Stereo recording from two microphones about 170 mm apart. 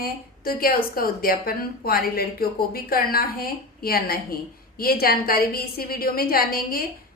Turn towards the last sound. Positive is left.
turn(degrees=60)  # may be behind; listen again after turning